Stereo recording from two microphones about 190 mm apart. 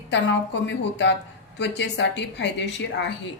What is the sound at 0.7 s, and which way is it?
A woman's voice, 70° left (ahead or behind).